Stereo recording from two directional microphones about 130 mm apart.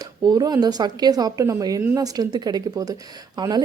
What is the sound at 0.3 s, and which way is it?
A man's voice, 30° right (ahead or behind).